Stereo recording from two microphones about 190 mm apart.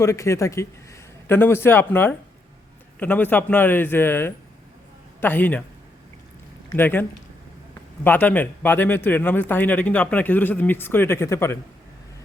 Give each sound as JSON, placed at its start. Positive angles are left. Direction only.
{"t": 0.0, "sound": "a man's voice", "side_deg": 15}
{"t": 6.7, "sound": "a man's voice", "side_deg": 10}